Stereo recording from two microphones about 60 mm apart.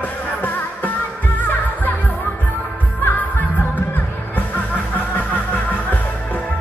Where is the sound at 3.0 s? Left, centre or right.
Left.